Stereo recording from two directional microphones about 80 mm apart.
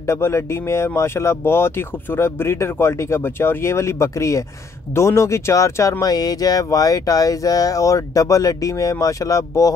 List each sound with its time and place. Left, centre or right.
0.0 s speech: left